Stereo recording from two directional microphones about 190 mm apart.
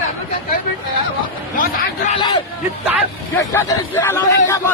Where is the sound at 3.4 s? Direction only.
15° left (ahead or behind).